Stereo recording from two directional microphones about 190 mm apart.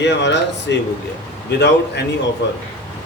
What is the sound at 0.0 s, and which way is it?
Speech, 65° left (ahead or behind).